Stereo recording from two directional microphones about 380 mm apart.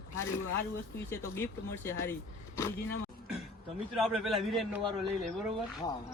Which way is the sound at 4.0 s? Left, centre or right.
Centre.